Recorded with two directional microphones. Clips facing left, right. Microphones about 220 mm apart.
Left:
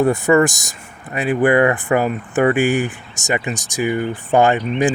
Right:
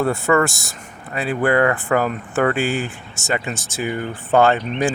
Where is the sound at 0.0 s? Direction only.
15° left (ahead or behind).